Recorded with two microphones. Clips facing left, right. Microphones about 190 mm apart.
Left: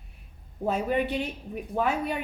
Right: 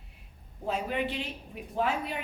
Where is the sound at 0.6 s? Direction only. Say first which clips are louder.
Left 5 dB; 50° left (ahead or behind).